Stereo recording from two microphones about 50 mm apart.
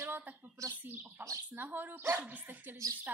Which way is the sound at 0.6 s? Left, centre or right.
Right.